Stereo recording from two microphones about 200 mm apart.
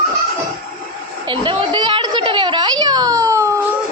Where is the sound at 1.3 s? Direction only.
25° right (ahead or behind).